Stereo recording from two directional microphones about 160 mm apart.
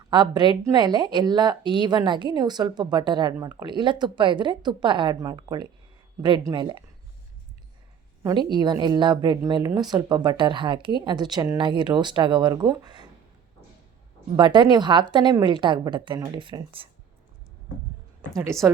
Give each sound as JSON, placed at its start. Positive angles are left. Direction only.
{"t": 0.1, "sound": "speech", "side_deg": -30}
{"t": 8.2, "sound": "speech", "side_deg": -30}
{"t": 14.3, "sound": "speech", "side_deg": -30}